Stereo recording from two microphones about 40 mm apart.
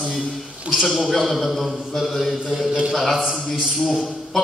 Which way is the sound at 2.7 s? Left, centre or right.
Right.